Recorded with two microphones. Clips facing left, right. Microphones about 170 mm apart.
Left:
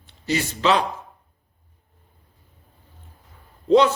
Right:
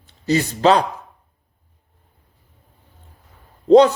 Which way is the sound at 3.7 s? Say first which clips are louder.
Right 5 dB; 40° right (ahead or behind).